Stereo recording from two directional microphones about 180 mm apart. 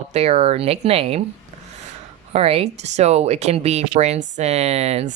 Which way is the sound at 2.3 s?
30° right (ahead or behind).